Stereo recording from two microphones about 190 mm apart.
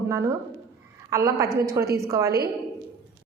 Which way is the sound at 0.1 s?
15° right (ahead or behind).